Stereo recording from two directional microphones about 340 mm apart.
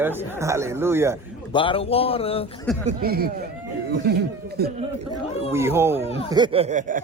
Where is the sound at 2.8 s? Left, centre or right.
Right.